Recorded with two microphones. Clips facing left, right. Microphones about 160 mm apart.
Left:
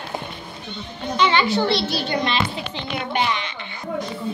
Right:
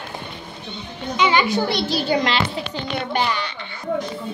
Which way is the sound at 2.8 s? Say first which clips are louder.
Right 1 dB; 35° right (ahead or behind).